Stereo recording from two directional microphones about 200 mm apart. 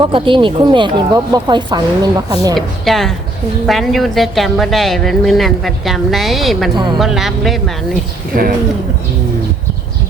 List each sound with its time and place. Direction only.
0.0 s speech: 25° right (ahead or behind)
2.6 s speech: centre (ahead or behind)
6.7 s speech: 20° right (ahead or behind)
7.0 s speech: centre (ahead or behind)
8.3 s speech: 45° right (ahead or behind)